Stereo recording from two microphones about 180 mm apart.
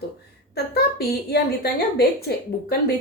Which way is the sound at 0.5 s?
65° left (ahead or behind).